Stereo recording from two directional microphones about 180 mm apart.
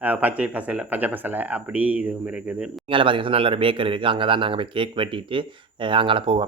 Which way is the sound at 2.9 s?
30° right (ahead or behind).